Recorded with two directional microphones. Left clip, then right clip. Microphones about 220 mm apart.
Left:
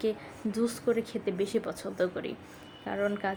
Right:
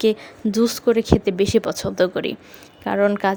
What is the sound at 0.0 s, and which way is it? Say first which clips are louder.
A woman's voice: right 12 dB; 45° right (ahead or behind).